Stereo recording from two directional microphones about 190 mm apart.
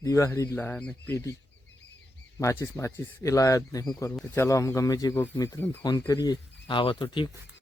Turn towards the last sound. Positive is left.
turn(degrees=25)  # may be behind; listen again after turning